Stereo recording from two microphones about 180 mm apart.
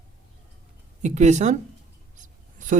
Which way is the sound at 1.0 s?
40° right (ahead or behind).